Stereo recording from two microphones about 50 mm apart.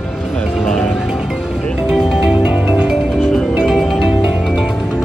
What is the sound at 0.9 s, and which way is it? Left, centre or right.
Music, centre.